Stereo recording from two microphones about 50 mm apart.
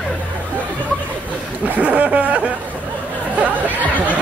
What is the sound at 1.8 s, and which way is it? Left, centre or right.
Speech, right.